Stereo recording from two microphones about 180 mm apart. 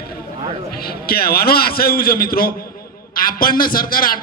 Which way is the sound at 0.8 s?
60° left (ahead or behind).